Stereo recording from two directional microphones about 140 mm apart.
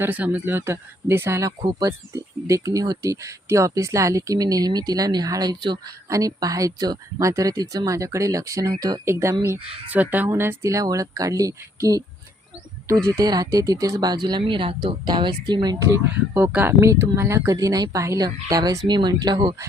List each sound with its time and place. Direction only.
0.0 s speech: 10° right (ahead or behind)
13.1 s speech: 25° right (ahead or behind)
16.3 s speech: 10° right (ahead or behind); by 19.5 s 30° right (ahead or behind)